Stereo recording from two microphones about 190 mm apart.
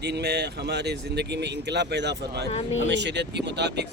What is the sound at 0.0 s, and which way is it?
Speech, 60° right (ahead or behind).